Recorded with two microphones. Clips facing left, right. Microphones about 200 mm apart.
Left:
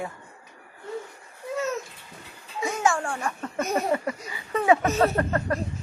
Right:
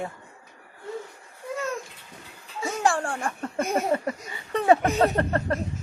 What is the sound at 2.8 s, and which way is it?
Speech, 35° right (ahead or behind).